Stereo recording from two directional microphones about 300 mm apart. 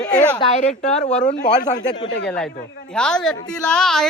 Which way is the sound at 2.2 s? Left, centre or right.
Centre.